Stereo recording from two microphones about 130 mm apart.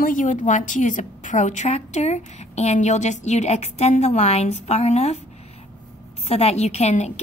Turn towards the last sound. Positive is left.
turn(degrees=60)  # may be behind; listen again after turning